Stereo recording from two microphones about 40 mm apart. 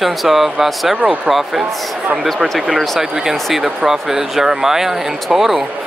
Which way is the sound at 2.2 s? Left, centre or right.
Centre.